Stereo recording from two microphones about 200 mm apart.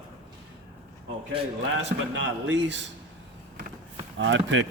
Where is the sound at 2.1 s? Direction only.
65° right (ahead or behind).